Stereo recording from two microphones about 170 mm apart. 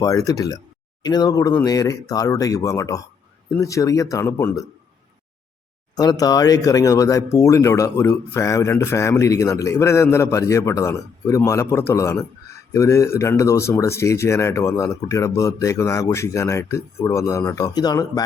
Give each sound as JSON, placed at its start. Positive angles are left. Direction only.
{"t": 0.0, "sound": "speech", "side_deg": 20}
{"t": 6.0, "sound": "speech", "side_deg": 20}